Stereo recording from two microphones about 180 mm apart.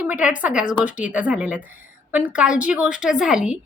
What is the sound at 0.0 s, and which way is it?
A woman's voice, 5° right (ahead or behind).